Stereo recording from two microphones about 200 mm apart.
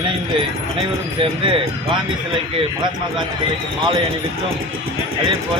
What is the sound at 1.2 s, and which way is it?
Speech, 25° right (ahead or behind).